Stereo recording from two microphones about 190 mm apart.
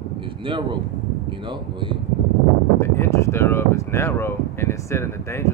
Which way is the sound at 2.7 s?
15° left (ahead or behind).